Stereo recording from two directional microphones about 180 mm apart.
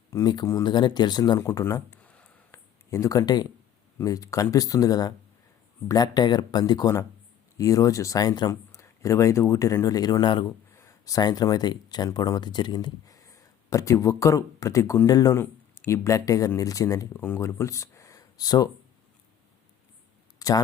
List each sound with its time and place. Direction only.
0.1 s speech: 20° left (ahead or behind)
10.7 s speech: 15° left (ahead or behind)
20.4 s a sound: 20° left (ahead or behind)